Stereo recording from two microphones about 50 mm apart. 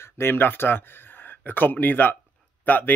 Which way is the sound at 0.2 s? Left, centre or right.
Left.